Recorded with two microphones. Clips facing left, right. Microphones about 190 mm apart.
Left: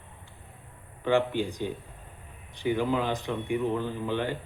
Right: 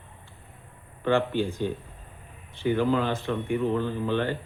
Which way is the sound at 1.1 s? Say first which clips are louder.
Right 1 dB; 15° left (ahead or behind).